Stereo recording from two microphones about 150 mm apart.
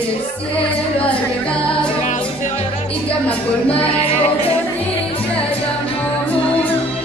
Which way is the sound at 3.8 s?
40° left (ahead or behind).